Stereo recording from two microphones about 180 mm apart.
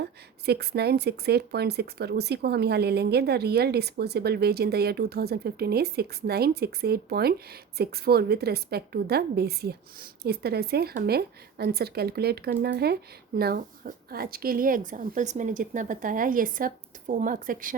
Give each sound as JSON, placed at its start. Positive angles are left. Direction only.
{"t": 0.0, "sound": "speech", "side_deg": -65}